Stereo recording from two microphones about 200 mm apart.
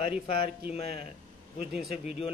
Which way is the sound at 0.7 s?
30° left (ahead or behind).